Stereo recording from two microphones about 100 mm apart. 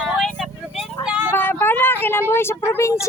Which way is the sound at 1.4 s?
20° left (ahead or behind).